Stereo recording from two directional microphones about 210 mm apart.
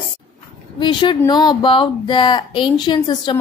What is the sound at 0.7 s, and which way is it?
Speech, 20° left (ahead or behind).